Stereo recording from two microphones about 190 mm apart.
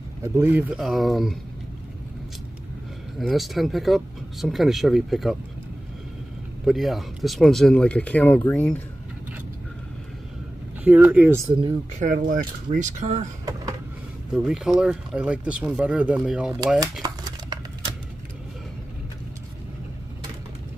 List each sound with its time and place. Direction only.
0.2 s speech: 10° right (ahead or behind)
3.2 s speech: centre (ahead or behind)
6.6 s speech: centre (ahead or behind)
10.8 s speech: 10° right (ahead or behind)
12.0 s speech: 45° right (ahead or behind)
14.3 s speech: 5° right (ahead or behind)
17.0 s crumpling: 20° right (ahead or behind)